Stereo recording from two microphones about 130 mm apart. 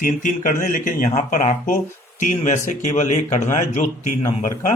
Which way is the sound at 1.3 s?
75° left (ahead or behind).